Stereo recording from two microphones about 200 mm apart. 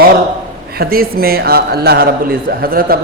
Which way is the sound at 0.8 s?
50° right (ahead or behind).